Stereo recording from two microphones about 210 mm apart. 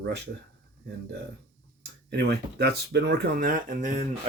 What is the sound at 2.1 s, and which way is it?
Speech, 55° right (ahead or behind).